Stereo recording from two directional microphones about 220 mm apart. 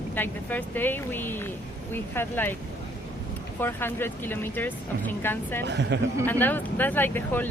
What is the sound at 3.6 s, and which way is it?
Speech, 10° left (ahead or behind).